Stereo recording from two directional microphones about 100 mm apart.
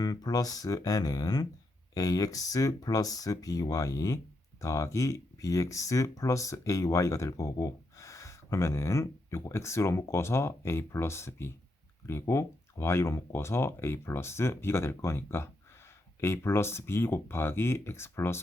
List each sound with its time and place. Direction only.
0.0 s speech: 40° left (ahead or behind); by 18.4 s 25° left (ahead or behind)